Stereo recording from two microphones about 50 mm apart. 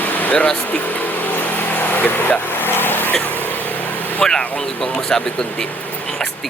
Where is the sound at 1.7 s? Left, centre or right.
Left.